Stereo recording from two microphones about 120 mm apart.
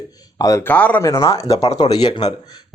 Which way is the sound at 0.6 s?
15° left (ahead or behind).